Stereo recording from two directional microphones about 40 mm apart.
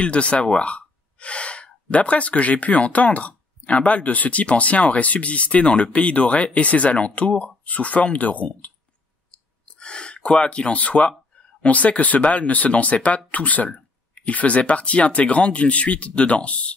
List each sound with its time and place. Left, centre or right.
0.0 s speech: left
9.3 s a sound: left
11.6 s speech: left